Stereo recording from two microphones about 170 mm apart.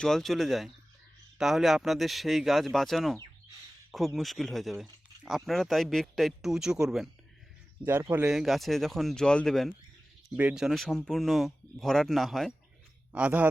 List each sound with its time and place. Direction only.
0.0 s speech: centre (ahead or behind)